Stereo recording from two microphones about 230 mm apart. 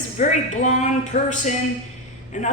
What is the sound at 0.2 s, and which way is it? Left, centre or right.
A woman's voice, left.